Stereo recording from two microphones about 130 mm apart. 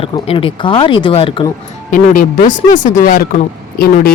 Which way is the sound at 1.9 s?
90° left.